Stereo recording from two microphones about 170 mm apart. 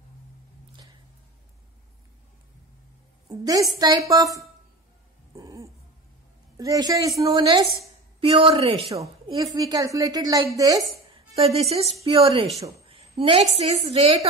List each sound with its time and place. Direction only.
3.3 s a woman's voice: 20° right (ahead or behind)
5.3 s a sound: 20° right (ahead or behind)
6.5 s a woman's voice: 20° right (ahead or behind)
9.0 s a woman's voice: 25° right (ahead or behind)
11.5 s a woman's voice: 35° right (ahead or behind)